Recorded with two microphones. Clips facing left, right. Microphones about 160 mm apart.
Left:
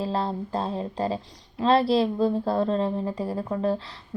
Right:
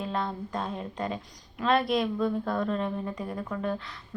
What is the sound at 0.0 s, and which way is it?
Speech, 30° left (ahead or behind).